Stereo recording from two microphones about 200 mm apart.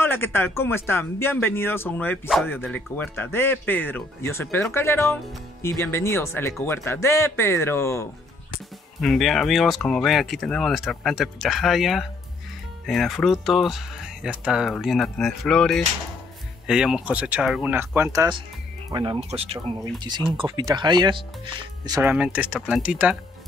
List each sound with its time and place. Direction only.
0.0 s a man's voice: 10° left (ahead or behind)
9.0 s speech: centre (ahead or behind); by 22.1 s 20° right (ahead or behind)
22.1 s speech: 5° right (ahead or behind)